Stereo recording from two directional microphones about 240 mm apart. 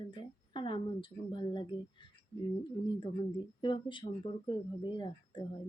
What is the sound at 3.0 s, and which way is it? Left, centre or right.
Speech, centre.